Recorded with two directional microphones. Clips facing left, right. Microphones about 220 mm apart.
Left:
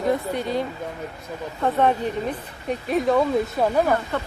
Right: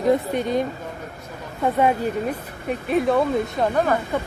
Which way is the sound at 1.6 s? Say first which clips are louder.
Right 1 dB; 10° right (ahead or behind).